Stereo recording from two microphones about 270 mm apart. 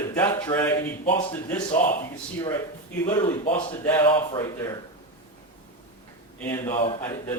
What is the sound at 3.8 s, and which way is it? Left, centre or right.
Speech, centre.